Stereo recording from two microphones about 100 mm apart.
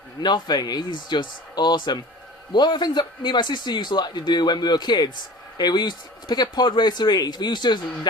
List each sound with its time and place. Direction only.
0.2 s speech: 45° left (ahead or behind)